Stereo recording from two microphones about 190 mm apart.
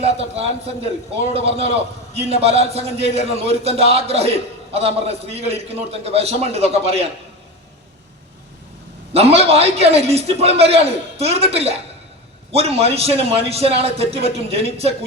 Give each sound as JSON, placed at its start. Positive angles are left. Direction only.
{"t": 0.0, "sound": "a man's voice", "side_deg": -30}
{"t": 9.1, "sound": "a man's voice", "side_deg": -30}